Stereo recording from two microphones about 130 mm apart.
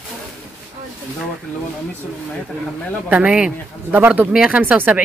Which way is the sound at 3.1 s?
10° right (ahead or behind).